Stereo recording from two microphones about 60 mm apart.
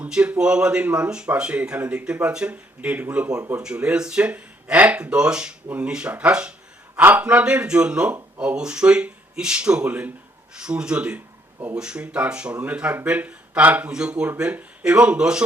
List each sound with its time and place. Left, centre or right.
0.1 s speech: centre
13.9 s speech: centre